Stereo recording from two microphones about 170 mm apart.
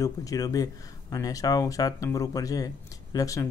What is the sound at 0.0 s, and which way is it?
Speech, 20° left (ahead or behind).